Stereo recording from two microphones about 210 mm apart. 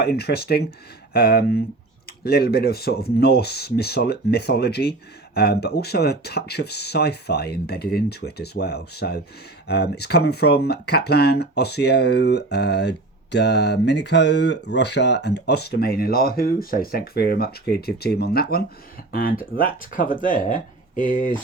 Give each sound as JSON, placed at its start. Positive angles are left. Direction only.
{"t": 0.0, "sound": "speech", "side_deg": 50}